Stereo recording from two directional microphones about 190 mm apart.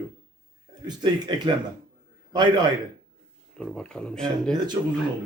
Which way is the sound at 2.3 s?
20° right (ahead or behind).